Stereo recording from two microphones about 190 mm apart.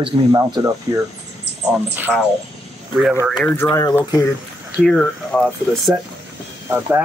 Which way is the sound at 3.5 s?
15° left (ahead or behind).